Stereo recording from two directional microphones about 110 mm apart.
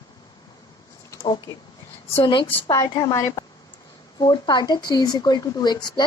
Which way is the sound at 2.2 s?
50° left (ahead or behind).